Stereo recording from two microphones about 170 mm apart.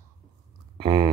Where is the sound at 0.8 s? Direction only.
25° right (ahead or behind).